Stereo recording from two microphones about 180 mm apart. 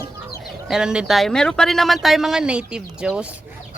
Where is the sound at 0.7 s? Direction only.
5° right (ahead or behind).